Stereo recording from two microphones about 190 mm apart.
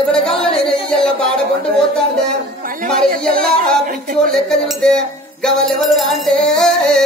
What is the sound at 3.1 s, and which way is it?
Speech, 50° right (ahead or behind).